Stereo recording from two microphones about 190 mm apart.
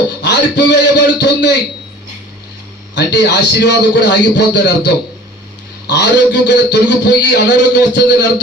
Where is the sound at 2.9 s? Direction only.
65° left (ahead or behind).